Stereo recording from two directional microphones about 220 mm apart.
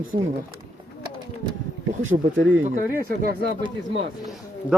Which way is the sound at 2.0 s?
35° right (ahead or behind).